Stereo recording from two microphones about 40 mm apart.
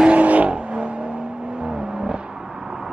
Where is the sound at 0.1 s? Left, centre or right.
Right; by 2.1 s centre.